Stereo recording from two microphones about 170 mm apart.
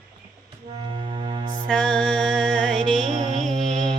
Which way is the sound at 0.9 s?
30° right (ahead or behind).